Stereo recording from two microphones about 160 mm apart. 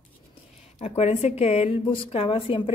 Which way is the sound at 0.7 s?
40° left (ahead or behind).